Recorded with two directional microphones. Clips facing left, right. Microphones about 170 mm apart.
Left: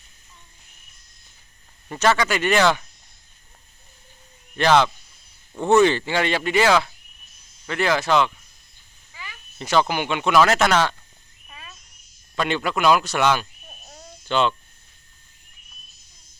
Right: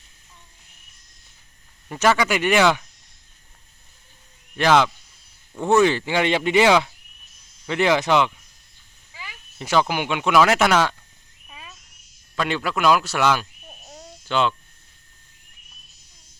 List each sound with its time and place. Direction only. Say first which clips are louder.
1.9 s speech: right 1 dB; 10° right (ahead or behind)
4.5 s speech: even; 5° right (ahead or behind)
11.4 s a sound: right 1 dB; 10° right (ahead or behind)
12.4 s speech: left 1 dB; 5° right (ahead or behind)